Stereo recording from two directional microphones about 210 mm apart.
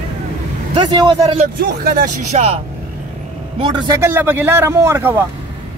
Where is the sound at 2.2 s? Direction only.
30° right (ahead or behind).